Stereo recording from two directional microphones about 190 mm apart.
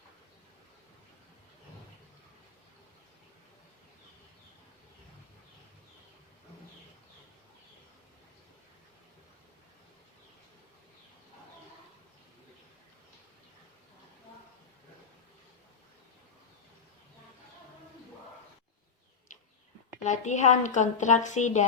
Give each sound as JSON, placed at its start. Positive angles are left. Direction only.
{"t": 20.1, "sound": "a woman's voice", "side_deg": 40}